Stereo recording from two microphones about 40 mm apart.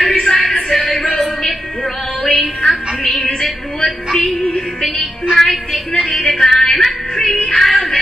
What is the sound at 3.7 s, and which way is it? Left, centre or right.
Music, centre.